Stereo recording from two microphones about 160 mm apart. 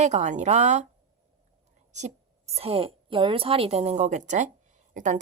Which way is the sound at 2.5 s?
35° right (ahead or behind).